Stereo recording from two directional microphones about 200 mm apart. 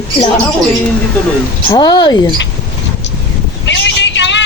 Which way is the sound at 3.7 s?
65° left (ahead or behind).